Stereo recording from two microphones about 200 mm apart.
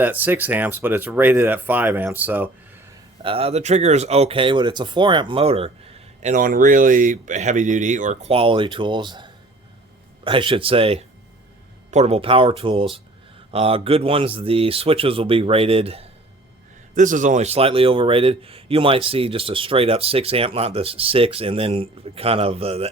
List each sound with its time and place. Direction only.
0.0 s speech: 10° right (ahead or behind)
3.2 s speech: 30° right (ahead or behind)
6.2 s speech: 40° right (ahead or behind)
16.9 s speech: 40° right (ahead or behind)